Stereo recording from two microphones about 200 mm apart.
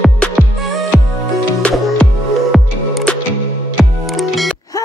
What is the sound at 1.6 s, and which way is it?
Music, centre (ahead or behind).